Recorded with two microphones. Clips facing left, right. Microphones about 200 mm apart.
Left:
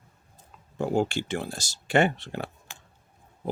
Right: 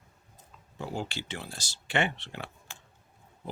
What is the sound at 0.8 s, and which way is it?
Speech, 50° left (ahead or behind).